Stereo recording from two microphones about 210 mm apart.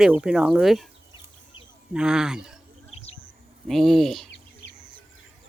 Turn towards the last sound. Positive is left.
turn(degrees=0)  # may be behind; listen again after turning